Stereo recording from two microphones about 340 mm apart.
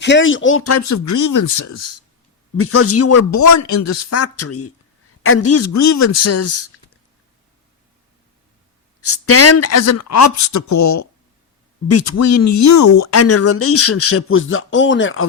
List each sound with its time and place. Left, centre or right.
0.0 s speech: left
9.0 s speech: left